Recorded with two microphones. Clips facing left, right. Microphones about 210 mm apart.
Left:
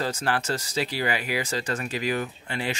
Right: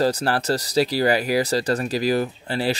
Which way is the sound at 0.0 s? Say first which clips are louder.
Right 6 dB; 40° right (ahead or behind).